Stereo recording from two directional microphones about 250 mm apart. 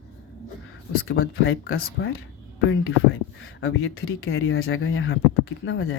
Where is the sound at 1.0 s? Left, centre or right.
Left.